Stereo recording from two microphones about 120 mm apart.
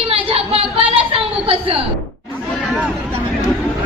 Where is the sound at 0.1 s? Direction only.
55° right (ahead or behind).